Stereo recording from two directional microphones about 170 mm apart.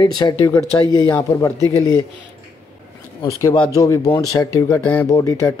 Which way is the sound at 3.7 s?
20° left (ahead or behind).